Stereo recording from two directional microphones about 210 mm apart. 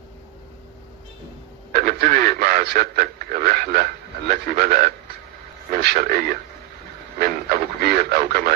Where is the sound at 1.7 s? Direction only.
45° right (ahead or behind).